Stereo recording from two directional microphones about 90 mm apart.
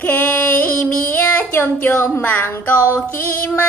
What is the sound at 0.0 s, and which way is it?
Female singing, 20° left (ahead or behind).